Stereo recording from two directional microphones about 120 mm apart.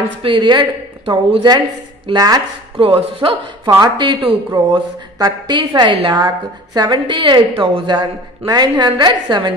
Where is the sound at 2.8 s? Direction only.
50° right (ahead or behind).